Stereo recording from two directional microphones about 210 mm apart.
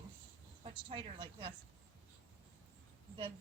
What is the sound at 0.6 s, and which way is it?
Speech, 25° right (ahead or behind).